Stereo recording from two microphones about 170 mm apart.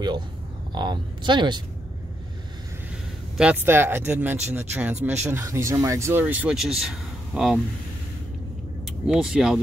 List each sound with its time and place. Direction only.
0.7 s speech: 25° right (ahead or behind)
3.3 s speech: 10° right (ahead or behind)
8.8 s speech: 5° right (ahead or behind)